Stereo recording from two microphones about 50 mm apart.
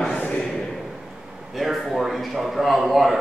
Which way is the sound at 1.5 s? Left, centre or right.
Centre.